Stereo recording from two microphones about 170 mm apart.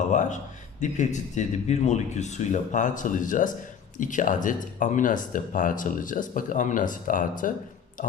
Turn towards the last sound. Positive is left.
turn(degrees=50)  # may be behind; listen again after turning